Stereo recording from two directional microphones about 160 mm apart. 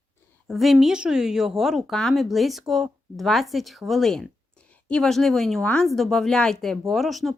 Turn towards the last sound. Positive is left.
turn(degrees=0)  # may be behind; listen again after turning